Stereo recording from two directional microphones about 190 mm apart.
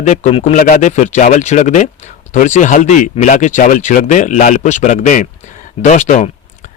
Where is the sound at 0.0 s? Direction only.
40° left (ahead or behind).